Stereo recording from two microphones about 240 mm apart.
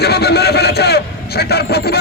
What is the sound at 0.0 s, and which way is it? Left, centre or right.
Vehicle, left.